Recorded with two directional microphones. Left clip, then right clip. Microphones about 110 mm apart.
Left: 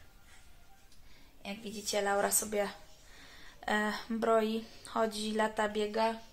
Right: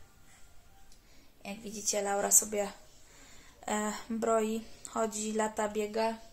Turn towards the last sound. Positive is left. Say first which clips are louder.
# even
turn(degrees=5)  # may be behind; listen again after turning